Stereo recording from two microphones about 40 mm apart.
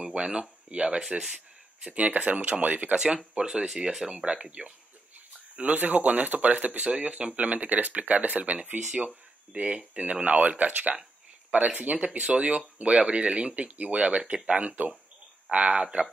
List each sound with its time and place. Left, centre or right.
0.1 s speech: right
1.3 s a sound: right
2.0 s speech: right
3.3 s speech: right
3.6 s speech: centre
4.1 s speech: right
5.6 s speech: right